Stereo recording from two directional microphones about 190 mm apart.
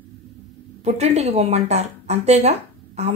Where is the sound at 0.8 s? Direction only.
35° right (ahead or behind).